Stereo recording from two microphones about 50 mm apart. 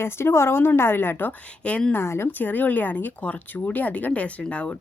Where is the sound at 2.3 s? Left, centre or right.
Left.